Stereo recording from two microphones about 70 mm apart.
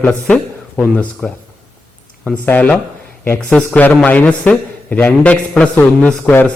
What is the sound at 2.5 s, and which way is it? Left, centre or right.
Speech, left.